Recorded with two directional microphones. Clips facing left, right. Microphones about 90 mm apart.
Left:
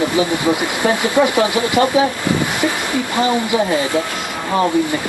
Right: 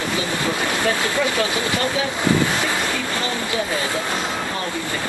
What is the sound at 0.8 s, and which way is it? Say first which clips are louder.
Speech: left 7 dB; 15° left (ahead or behind).